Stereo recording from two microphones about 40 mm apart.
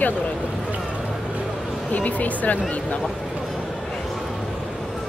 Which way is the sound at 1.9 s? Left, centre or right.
Left.